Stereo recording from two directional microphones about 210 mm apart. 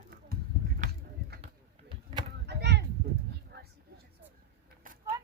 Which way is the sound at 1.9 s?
25° right (ahead or behind).